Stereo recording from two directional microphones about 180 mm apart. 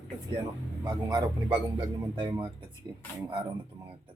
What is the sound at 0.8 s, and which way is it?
Speech, 20° right (ahead or behind).